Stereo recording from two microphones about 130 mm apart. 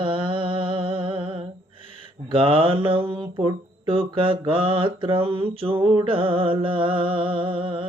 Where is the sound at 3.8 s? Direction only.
45° right (ahead or behind).